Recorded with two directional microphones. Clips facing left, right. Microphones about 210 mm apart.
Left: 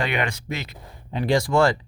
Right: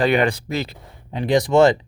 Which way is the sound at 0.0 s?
35° right (ahead or behind).